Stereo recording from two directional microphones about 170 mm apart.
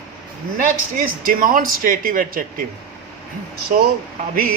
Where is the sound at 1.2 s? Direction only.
55° right (ahead or behind).